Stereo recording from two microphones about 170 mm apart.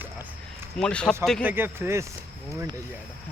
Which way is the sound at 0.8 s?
5° left (ahead or behind).